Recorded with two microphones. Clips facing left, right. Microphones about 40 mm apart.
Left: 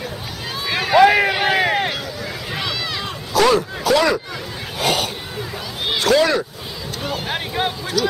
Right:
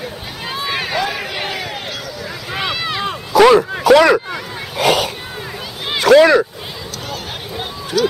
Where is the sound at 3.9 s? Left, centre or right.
Right.